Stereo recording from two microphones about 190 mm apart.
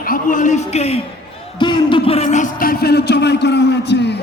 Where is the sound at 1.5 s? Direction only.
25° left (ahead or behind); by 4.2 s 65° left (ahead or behind).